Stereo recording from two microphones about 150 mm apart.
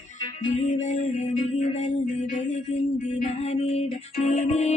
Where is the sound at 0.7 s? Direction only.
50° left (ahead or behind).